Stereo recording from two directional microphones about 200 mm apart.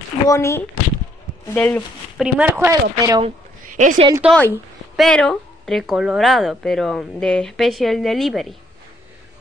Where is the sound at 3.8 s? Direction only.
40° right (ahead or behind).